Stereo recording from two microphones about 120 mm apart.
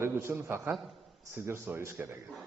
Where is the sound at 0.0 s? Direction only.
20° right (ahead or behind).